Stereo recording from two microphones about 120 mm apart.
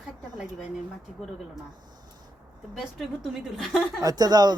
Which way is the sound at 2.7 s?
5° right (ahead or behind).